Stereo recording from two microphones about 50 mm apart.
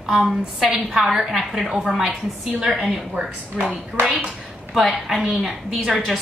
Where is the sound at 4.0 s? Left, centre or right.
Right.